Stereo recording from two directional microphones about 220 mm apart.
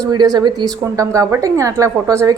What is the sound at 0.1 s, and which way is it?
A woman's voice, 20° right (ahead or behind).